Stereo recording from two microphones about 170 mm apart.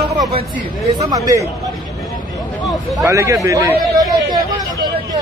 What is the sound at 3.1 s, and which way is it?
Speech, 15° right (ahead or behind).